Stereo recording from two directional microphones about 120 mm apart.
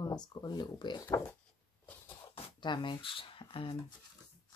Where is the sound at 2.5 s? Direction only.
40° left (ahead or behind).